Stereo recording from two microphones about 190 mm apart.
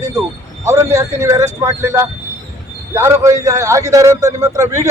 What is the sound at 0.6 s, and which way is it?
A man's voice, 15° right (ahead or behind).